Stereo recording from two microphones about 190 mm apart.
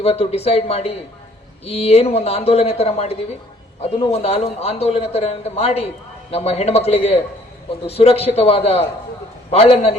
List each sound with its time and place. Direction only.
0.0 s a man's voice: 30° left (ahead or behind)